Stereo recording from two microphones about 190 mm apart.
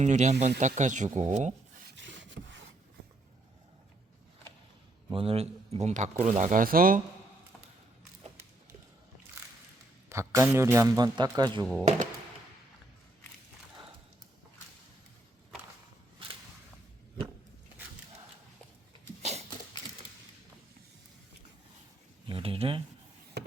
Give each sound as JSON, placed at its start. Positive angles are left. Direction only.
{"t": 0.0, "sound": "speech", "side_deg": -40}
{"t": 2.0, "sound": "a sound", "side_deg": -75}
{"t": 5.1, "sound": "speech", "side_deg": -30}
{"t": 10.1, "sound": "speech", "side_deg": -15}
{"t": 19.2, "sound": "a sound", "side_deg": -35}
{"t": 22.3, "sound": "speech", "side_deg": -30}